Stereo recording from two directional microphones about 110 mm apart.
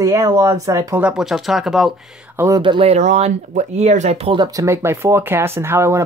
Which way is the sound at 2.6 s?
50° right (ahead or behind).